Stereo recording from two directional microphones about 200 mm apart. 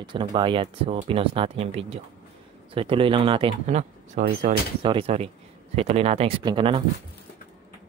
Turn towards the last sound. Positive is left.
turn(degrees=-25)  # may be behind; listen again after turning